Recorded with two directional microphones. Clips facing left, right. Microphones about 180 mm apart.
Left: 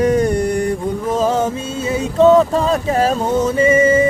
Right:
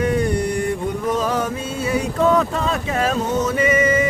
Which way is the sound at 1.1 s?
25° left (ahead or behind).